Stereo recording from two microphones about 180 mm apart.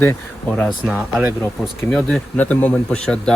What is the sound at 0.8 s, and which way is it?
Speech, 10° right (ahead or behind).